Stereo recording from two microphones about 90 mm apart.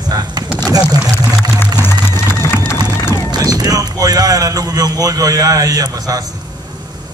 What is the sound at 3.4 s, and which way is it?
A man's voice, 45° right (ahead or behind).